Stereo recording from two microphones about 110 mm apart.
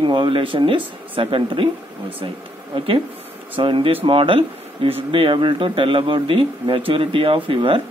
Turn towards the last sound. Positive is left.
turn(degrees=-50)  # may be behind; listen again after turning